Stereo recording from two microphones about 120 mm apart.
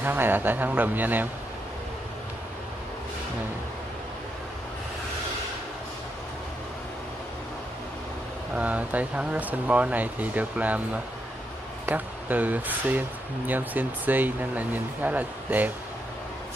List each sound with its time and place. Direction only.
0.0 s speech: 15° right (ahead or behind)
8.5 s speech: 10° right (ahead or behind)